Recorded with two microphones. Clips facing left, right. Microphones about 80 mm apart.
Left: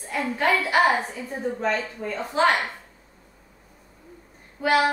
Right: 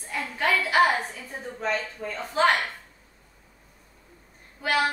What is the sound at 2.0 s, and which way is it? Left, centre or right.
Speech, centre.